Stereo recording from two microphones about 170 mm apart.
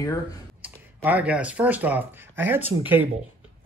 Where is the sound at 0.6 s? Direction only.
10° right (ahead or behind).